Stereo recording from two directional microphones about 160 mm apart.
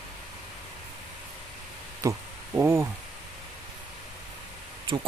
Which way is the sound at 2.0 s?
15° right (ahead or behind).